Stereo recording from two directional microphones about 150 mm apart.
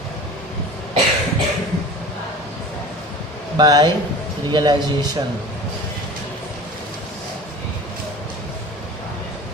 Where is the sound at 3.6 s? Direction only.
25° right (ahead or behind).